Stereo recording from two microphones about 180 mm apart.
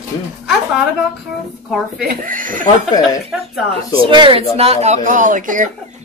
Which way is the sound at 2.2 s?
45° right (ahead or behind).